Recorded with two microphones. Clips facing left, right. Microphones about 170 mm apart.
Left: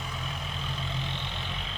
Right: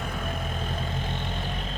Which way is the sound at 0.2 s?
50° right (ahead or behind).